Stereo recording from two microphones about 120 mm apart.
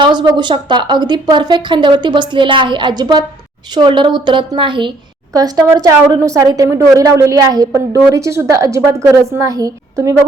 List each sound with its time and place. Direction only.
0.0 s a woman's voice: 40° right (ahead or behind)
5.3 s a woman's voice: 30° right (ahead or behind)